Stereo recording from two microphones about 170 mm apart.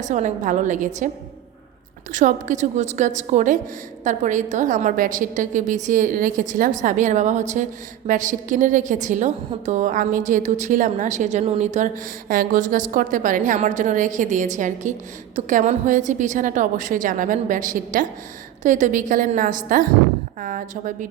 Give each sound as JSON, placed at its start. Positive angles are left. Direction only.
{"t": 0.0, "sound": "a woman's voice", "side_deg": -45}
{"t": 2.1, "sound": "a woman's voice", "side_deg": -45}
{"t": 12.3, "sound": "a woman's voice", "side_deg": -55}